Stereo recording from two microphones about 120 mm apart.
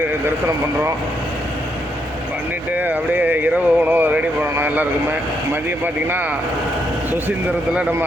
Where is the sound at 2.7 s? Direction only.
15° right (ahead or behind).